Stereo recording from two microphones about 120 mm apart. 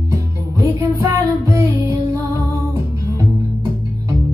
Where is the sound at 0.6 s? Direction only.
25° right (ahead or behind).